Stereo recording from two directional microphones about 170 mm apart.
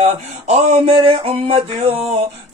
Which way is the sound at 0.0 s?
40° right (ahead or behind).